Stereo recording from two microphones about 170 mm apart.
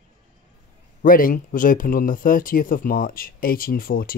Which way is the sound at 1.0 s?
55° left (ahead or behind).